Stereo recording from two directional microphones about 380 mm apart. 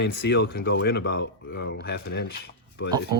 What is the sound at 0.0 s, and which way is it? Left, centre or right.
Speech, left.